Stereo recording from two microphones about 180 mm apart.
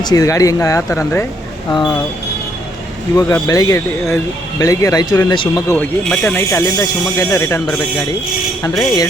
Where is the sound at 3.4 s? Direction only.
20° left (ahead or behind).